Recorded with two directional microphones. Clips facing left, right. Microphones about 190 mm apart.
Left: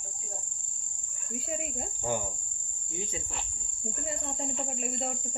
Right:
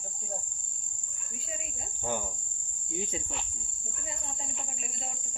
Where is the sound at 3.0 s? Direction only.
20° right (ahead or behind).